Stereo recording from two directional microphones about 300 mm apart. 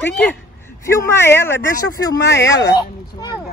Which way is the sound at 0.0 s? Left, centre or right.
Centre.